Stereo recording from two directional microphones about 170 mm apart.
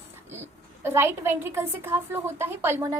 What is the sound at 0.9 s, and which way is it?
A woman's voice, 15° right (ahead or behind).